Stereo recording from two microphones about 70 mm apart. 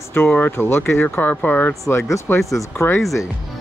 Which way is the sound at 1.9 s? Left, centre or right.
Left.